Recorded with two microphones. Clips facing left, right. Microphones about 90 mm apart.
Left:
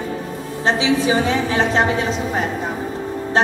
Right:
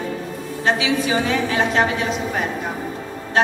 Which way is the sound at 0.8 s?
30° left (ahead or behind).